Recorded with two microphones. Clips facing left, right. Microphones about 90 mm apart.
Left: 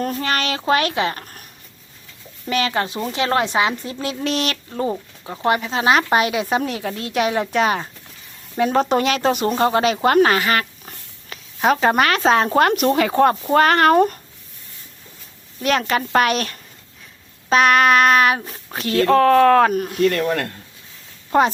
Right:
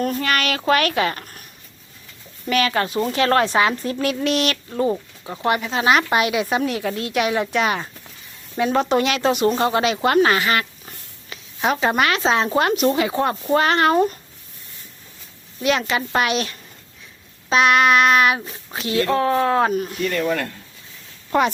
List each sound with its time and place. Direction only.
0.0 s a sound: 30° left (ahead or behind)
0.7 s speech: 30° left (ahead or behind)
2.5 s speech: 30° left (ahead or behind)
4.9 s speech: 20° left (ahead or behind)
5.5 s speech: 35° left (ahead or behind); by 14.2 s 50° left (ahead or behind)
15.6 s speech: 45° left (ahead or behind)